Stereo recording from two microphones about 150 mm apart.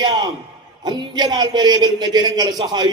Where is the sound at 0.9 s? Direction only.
30° right (ahead or behind).